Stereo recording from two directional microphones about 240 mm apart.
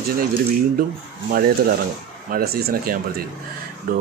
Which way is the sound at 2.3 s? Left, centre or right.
Right.